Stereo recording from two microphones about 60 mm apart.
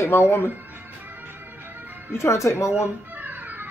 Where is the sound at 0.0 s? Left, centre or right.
Left.